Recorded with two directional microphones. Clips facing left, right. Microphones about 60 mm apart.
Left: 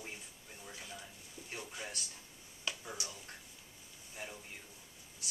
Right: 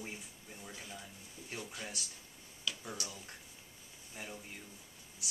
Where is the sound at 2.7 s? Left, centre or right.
Left.